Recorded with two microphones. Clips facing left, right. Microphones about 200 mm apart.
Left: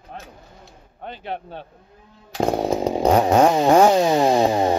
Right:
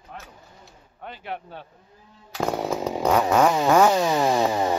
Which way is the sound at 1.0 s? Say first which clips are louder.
Left 4 dB; 25° left (ahead or behind).